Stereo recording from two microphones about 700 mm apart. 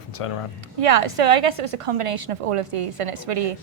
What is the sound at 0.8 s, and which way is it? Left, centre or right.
A woman's voice, right.